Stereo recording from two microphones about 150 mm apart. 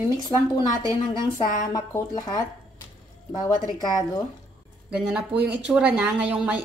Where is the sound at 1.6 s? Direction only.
25° left (ahead or behind).